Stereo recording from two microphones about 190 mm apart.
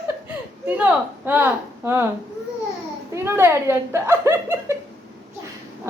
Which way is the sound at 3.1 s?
15° right (ahead or behind).